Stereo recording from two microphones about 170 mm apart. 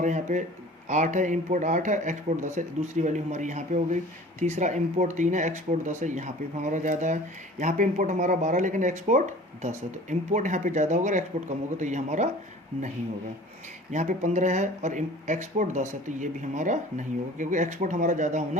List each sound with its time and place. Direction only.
0.0 s speech: 45° right (ahead or behind)
13.9 s speech: 45° right (ahead or behind)